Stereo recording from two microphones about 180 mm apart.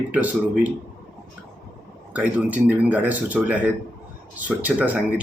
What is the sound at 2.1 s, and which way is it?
Speech, 10° right (ahead or behind).